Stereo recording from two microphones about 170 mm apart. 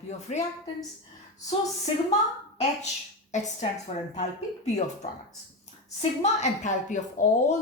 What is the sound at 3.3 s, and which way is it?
Speech, 45° left (ahead or behind).